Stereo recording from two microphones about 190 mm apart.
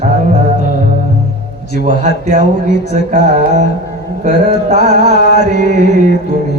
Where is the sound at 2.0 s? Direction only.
60° left (ahead or behind).